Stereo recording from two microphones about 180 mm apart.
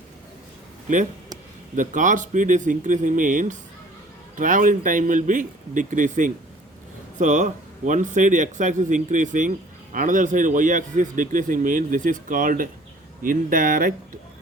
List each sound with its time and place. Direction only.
1.7 s a man's voice: 45° right (ahead or behind)